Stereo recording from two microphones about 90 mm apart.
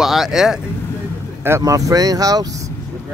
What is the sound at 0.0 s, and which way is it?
Speech, 5° right (ahead or behind).